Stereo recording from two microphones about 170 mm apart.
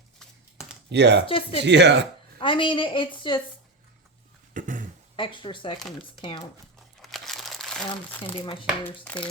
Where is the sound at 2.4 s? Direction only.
30° left (ahead or behind).